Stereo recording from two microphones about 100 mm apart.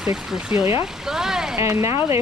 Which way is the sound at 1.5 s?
30° right (ahead or behind).